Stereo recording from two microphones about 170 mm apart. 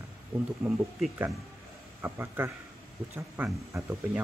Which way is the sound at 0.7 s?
Centre (ahead or behind).